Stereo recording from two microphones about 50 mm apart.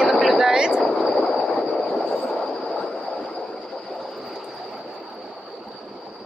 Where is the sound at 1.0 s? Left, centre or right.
Centre.